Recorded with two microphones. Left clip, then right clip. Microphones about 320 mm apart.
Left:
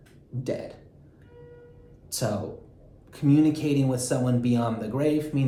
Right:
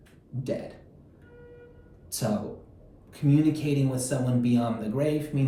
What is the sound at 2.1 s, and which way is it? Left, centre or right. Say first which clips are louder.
Speech: left 1 dB; centre.